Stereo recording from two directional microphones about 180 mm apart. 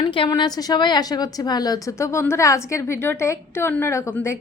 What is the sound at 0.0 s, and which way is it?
A woman's voice, 25° left (ahead or behind).